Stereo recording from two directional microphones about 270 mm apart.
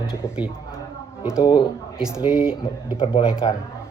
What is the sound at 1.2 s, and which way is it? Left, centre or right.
Speech, centre.